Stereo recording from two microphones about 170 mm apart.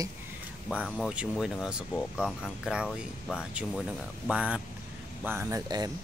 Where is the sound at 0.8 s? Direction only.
Centre (ahead or behind).